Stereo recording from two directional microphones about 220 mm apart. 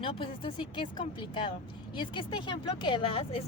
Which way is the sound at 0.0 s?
25° left (ahead or behind).